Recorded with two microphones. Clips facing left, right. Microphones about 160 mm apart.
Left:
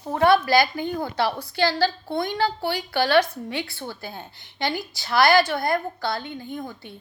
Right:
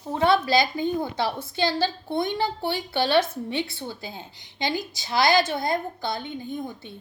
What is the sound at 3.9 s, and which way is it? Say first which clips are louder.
Speech: left 1 dB; 55° left (ahead or behind).